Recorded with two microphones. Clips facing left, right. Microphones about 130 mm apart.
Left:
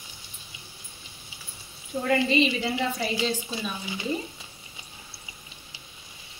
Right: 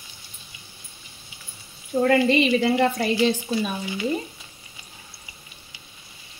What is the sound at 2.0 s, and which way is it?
A woman's voice, 60° right (ahead or behind).